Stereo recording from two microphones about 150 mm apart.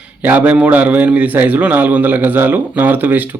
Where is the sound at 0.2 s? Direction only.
10° right (ahead or behind).